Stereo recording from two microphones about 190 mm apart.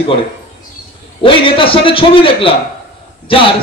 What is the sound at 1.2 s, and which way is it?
A man's voice, 30° left (ahead or behind).